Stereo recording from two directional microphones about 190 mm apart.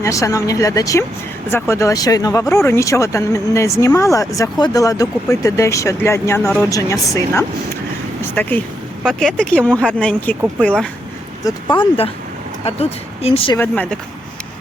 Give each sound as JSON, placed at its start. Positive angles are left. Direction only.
{"t": 0.0, "sound": "speech", "side_deg": 15}
{"t": 11.4, "sound": "speech", "side_deg": 20}
{"t": 12.6, "sound": "speech", "side_deg": 30}
{"t": 13.6, "sound": "speech", "side_deg": 10}